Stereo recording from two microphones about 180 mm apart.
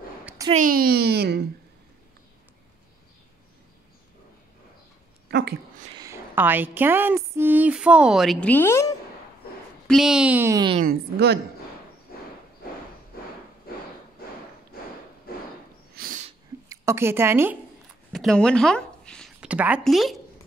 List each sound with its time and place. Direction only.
0.5 s speech: 50° right (ahead or behind)
5.9 s speech: 15° right (ahead or behind); by 8.9 s 15° left (ahead or behind)
9.8 s a woman's voice: centre (ahead or behind)
10.8 s speech: 60° right (ahead or behind)
15.3 s a sound: 55° left (ahead or behind)
16.0 s a sound: 55° right (ahead or behind)
16.6 s a woman's voice: 15° right (ahead or behind)
18.1 s a sound: centre (ahead or behind)
19.4 s a woman's voice: 5° right (ahead or behind)